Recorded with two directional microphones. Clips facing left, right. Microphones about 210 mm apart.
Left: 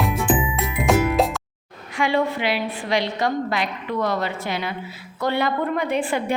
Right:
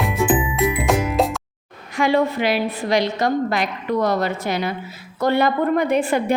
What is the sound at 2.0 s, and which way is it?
A woman's voice, 40° right (ahead or behind).